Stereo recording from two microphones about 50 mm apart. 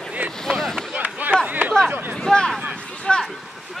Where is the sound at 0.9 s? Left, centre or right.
Right.